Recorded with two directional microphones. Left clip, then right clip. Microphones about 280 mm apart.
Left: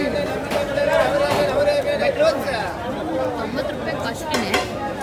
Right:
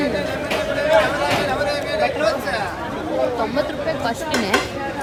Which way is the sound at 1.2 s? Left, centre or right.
Centre.